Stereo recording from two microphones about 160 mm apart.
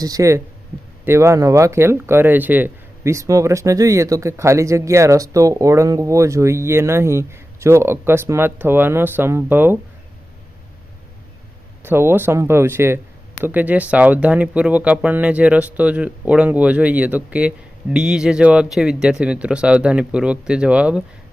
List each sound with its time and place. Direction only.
0.0 s speech: 20° right (ahead or behind)
11.8 s speech: 15° right (ahead or behind)